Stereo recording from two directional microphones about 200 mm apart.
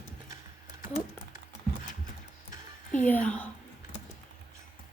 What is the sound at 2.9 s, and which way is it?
Speech, 10° left (ahead or behind).